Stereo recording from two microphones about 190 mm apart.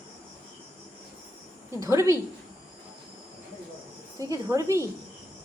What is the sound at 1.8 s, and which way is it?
Speech, 15° right (ahead or behind).